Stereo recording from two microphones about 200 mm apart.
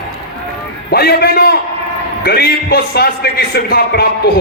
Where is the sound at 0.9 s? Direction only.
50° left (ahead or behind).